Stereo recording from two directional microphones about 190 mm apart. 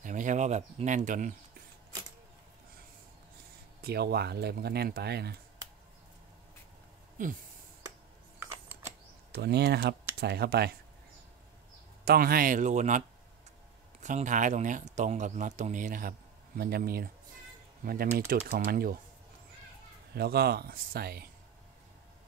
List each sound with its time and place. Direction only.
0.0 s a man's voice: 40° right (ahead or behind)
3.8 s speech: 60° right (ahead or behind)
8.4 s a sound: 15° right (ahead or behind)
9.4 s speech: 60° right (ahead or behind)
12.0 s speech: 50° right (ahead or behind)
14.0 s a man's voice: 40° right (ahead or behind)
20.2 s speech: 55° right (ahead or behind)